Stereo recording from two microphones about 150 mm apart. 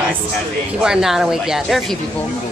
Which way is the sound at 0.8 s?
5° right (ahead or behind).